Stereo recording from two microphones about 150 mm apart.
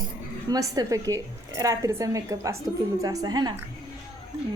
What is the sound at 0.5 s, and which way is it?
Speech, 25° right (ahead or behind).